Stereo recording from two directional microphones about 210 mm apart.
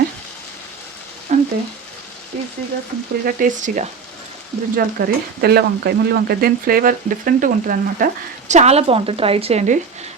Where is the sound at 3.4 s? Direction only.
35° right (ahead or behind).